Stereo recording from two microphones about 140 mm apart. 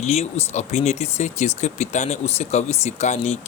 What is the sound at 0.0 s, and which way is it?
Speech, 50° left (ahead or behind).